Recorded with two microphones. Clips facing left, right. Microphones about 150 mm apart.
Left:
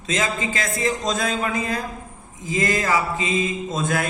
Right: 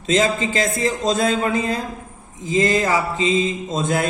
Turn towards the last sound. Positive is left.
turn(degrees=-25)  # may be behind; listen again after turning